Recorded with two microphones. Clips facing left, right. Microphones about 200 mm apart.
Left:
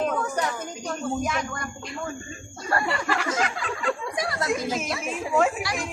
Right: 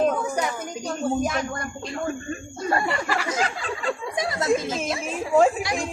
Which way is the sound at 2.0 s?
60° right (ahead or behind).